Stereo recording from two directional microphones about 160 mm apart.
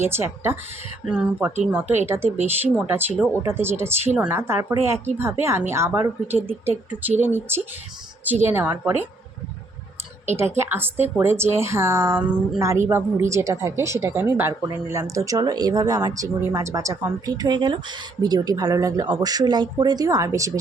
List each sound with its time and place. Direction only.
0.0 s speech: 15° right (ahead or behind)
10.6 s speech: 15° right (ahead or behind)